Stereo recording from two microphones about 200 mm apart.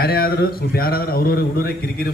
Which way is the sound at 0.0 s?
50° left (ahead or behind).